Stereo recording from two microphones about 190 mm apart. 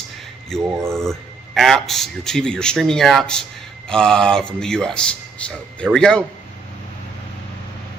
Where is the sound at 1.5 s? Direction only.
Centre (ahead or behind).